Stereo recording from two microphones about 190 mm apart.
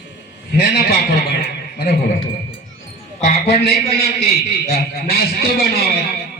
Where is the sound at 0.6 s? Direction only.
55° left (ahead or behind).